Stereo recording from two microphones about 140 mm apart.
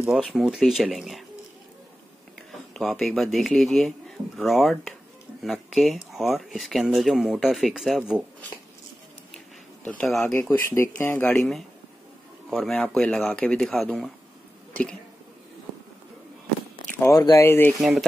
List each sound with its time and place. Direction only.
0.3 s speech: 5° right (ahead or behind)
2.7 s speech: centre (ahead or behind)
9.8 s speech: 5° left (ahead or behind)
10.7 s speech: 20° left (ahead or behind)
12.4 s speech: centre (ahead or behind)
14.7 s a sound: 10° left (ahead or behind)
17.0 s speech: 25° left (ahead or behind)
17.7 s speech: centre (ahead or behind)